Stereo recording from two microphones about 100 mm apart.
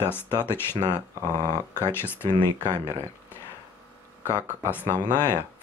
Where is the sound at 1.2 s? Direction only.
35° right (ahead or behind).